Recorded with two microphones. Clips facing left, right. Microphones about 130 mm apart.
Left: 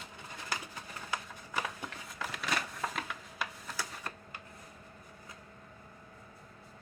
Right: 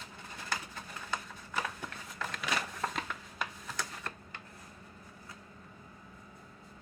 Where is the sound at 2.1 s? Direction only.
5° left (ahead or behind).